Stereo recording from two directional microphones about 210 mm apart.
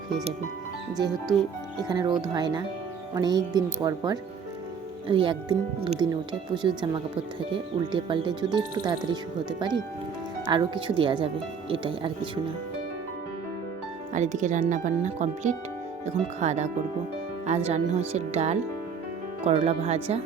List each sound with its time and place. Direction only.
0.9 s speech: 20° right (ahead or behind)
14.1 s speech: 35° right (ahead or behind)